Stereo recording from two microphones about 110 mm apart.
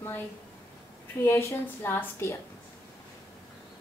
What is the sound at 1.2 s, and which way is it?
A woman's voice, 25° left (ahead or behind).